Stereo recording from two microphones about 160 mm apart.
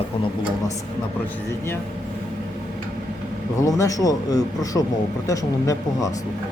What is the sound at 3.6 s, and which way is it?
Speech, 20° left (ahead or behind).